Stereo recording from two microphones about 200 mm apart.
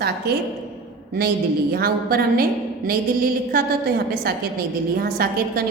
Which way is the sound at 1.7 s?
50° right (ahead or behind).